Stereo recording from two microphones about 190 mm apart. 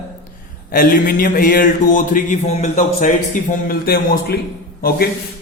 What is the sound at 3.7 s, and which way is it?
Speech, 55° left (ahead or behind).